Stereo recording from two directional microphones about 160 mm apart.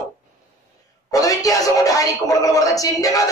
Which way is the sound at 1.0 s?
20° left (ahead or behind).